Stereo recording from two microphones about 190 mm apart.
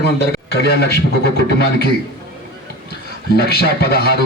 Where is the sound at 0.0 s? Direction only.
60° left (ahead or behind).